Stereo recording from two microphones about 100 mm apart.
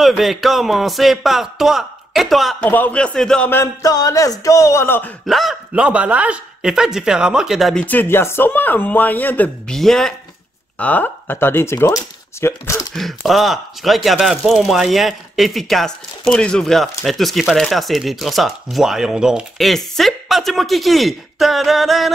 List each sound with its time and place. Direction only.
0.0 s speech: centre (ahead or behind)
2.6 s speech: 15° left (ahead or behind)
3.8 s music: 35° left (ahead or behind)
5.2 s speech: centre (ahead or behind)
5.7 s speech: 15° right (ahead or behind)
7.7 s speech: 15° left (ahead or behind)
9.7 s speech: 5° left (ahead or behind)
10.8 s speech: 15° left (ahead or behind)
12.9 s speech: centre (ahead or behind)